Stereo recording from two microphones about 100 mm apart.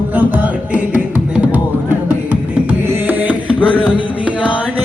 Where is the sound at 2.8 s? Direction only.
20° right (ahead or behind).